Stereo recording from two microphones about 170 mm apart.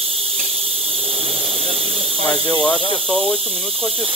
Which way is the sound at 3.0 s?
5° left (ahead or behind).